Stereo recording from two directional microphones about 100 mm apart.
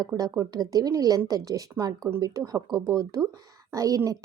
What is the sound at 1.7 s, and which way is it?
Speech, 25° right (ahead or behind).